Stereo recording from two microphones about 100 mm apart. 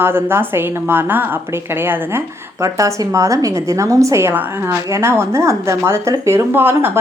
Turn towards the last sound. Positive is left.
turn(degrees=-20)  # may be behind; listen again after turning